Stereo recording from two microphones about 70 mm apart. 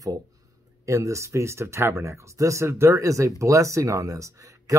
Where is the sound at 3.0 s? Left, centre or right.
Right.